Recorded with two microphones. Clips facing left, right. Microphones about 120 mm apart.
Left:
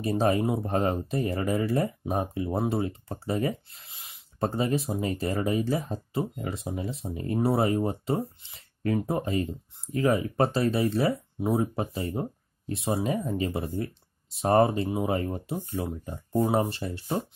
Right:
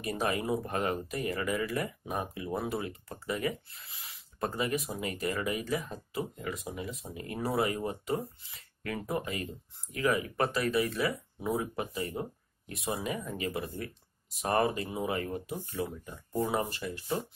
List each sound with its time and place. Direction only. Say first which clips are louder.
0.0 s speech: left 7 dB; 30° left (ahead or behind)
4.0 s a sound: left 5 dB; 20° left (ahead or behind)
4.5 s speech: left 5 dB; 30° left (ahead or behind)